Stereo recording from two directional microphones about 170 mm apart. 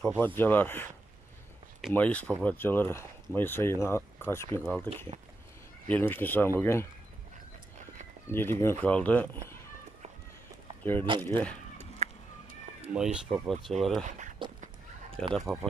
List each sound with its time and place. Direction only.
0.0 s speech: 10° left (ahead or behind)
2.0 s speech: 10° left (ahead or behind)
4.8 s speech: 35° right (ahead or behind)
5.9 s speech: 10° left (ahead or behind)
8.3 s speech: 15° left (ahead or behind)
10.8 s speech: 10° left (ahead or behind)
12.0 s a sound: 40° right (ahead or behind)
12.9 s speech: 5° right (ahead or behind)
14.0 s speech: 45° right (ahead or behind)
15.3 s speech: centre (ahead or behind)